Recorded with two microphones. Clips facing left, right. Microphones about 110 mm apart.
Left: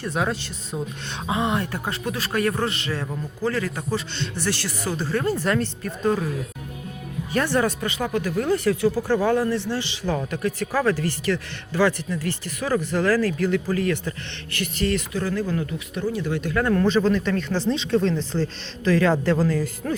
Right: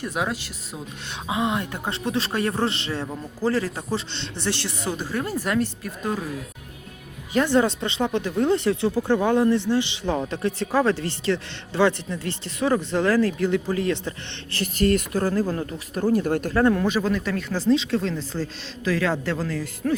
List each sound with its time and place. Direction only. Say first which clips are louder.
0.0 s speech: left 2 dB; 10° right (ahead or behind)
7.3 s speech: right 2 dB; 15° right (ahead or behind)
14.5 s speech: right 3 dB; 40° right (ahead or behind)
15.3 s speech: right 1 dB; 35° right (ahead or behind)
16.7 s speech: left 3 dB; 10° right (ahead or behind)